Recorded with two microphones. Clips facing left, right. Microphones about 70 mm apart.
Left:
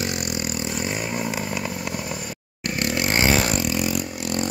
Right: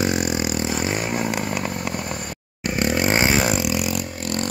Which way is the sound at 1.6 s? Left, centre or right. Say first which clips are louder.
Right 2 dB; right.